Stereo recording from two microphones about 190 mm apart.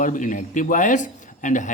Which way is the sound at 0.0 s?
40° left (ahead or behind).